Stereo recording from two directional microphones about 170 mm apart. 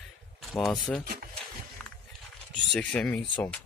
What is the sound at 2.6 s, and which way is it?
Speech, 5° left (ahead or behind).